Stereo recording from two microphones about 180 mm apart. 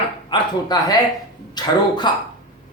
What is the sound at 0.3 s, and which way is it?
A man's voice, 20° left (ahead or behind).